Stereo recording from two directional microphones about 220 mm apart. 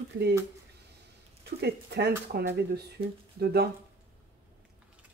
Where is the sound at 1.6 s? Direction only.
50° right (ahead or behind).